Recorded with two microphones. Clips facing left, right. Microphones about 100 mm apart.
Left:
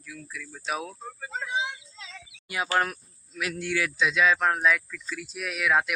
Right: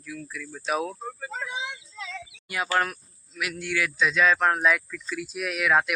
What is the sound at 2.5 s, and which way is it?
Speech, 20° left (ahead or behind).